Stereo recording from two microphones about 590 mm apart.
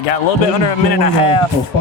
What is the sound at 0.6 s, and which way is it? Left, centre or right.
Speech, left.